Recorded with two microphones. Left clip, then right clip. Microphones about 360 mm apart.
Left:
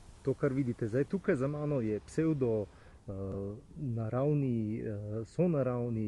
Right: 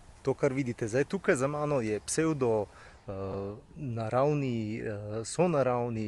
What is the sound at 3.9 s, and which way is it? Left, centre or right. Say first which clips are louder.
Speech: right 5 dB; right.